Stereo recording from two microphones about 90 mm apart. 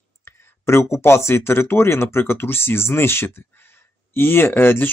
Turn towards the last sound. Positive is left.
turn(degrees=25)  # may be behind; listen again after turning